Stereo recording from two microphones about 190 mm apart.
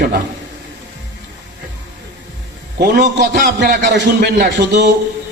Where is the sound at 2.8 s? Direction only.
65° right (ahead or behind).